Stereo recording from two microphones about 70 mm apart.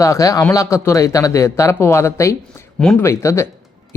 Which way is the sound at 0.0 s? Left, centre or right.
Left.